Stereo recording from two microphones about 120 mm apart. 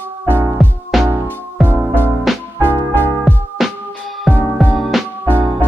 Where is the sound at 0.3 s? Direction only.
20° right (ahead or behind).